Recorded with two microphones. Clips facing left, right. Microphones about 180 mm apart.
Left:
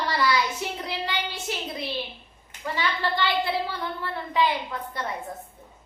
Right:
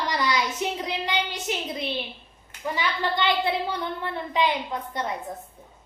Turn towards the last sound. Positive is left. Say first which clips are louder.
# right 2 dB
turn(degrees=-20)  # may be behind; listen again after turning